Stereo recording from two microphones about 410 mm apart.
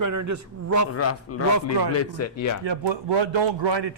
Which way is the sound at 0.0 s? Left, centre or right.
Right.